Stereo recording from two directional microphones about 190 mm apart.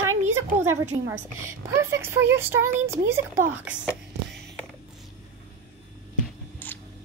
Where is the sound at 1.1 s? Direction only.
15° right (ahead or behind).